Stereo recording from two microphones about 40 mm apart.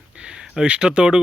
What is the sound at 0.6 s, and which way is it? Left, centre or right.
Speech, right.